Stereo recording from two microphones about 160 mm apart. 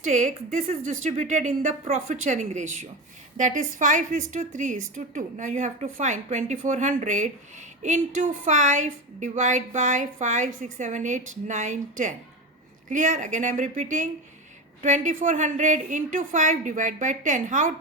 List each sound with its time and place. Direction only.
0.0 s a woman's voice: 55° right (ahead or behind)